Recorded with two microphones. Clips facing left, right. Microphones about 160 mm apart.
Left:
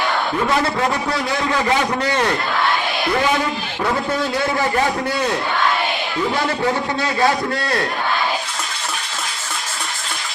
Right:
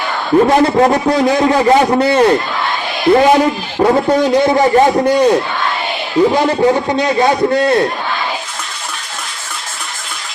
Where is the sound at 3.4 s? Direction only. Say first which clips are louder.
Right 9 dB; 40° right (ahead or behind).